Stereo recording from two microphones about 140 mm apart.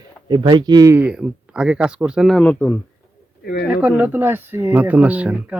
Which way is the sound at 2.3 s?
10° left (ahead or behind).